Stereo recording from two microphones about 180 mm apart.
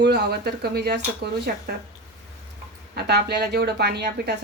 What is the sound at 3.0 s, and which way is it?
Speech, 65° right (ahead or behind).